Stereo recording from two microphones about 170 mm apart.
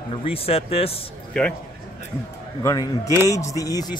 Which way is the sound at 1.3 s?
5° left (ahead or behind).